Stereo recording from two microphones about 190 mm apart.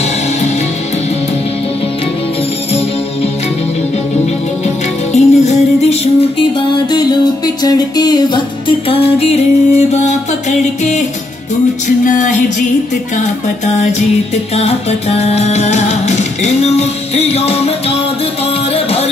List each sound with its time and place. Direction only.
0.0 s music: 35° left (ahead or behind)
4.6 s music: 35° left (ahead or behind)
6.9 s music: 20° left (ahead or behind); by 12.4 s 40° left (ahead or behind)
14.5 s music: 35° left (ahead or behind)